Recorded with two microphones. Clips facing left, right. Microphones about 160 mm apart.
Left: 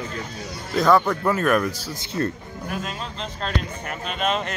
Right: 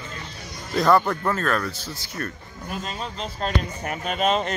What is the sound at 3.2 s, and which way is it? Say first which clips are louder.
Speech: right 2 dB; 45° right (ahead or behind).